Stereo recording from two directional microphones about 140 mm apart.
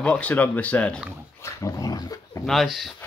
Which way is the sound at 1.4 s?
25° left (ahead or behind).